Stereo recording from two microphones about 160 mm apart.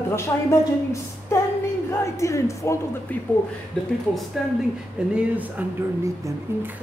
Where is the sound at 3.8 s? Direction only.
5° left (ahead or behind).